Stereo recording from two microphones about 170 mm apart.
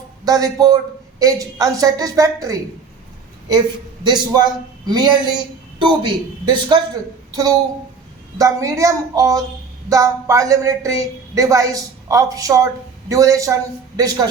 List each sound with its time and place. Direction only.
0.3 s a woman's voice: 20° right (ahead or behind)
4.0 s a woman's voice: 25° right (ahead or behind)
8.4 s a woman's voice: 20° right (ahead or behind)